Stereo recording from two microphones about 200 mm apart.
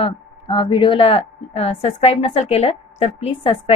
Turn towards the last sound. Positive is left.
turn(degrees=30)  # may be behind; listen again after turning